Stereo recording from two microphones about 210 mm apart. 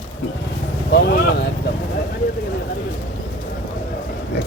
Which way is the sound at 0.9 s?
55° left (ahead or behind).